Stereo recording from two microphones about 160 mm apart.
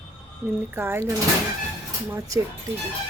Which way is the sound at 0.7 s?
15° right (ahead or behind).